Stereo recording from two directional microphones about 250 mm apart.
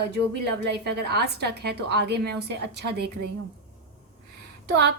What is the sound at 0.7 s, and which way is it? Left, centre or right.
A woman's voice, right.